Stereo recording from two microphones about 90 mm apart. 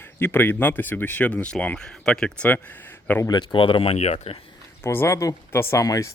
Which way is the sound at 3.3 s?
60° left (ahead or behind).